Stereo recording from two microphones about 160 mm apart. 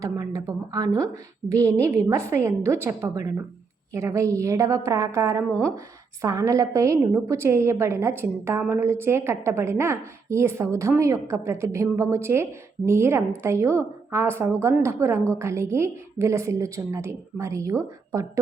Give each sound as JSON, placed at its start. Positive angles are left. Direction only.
{"t": 0.0, "sound": "a woman's voice", "side_deg": -20}